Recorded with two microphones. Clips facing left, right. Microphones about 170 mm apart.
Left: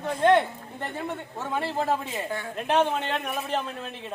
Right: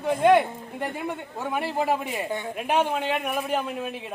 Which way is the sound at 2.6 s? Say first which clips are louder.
Left 1 dB; 10° right (ahead or behind).